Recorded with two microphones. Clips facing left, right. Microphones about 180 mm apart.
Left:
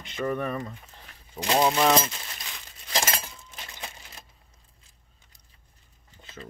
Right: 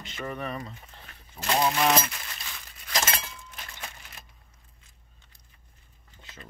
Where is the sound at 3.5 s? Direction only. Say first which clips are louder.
Left 4 dB; 20° left (ahead or behind).